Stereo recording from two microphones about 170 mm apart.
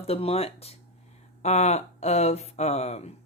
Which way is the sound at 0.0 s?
35° left (ahead or behind).